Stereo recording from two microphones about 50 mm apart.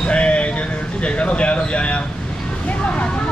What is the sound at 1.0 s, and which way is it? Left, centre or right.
Speech, left.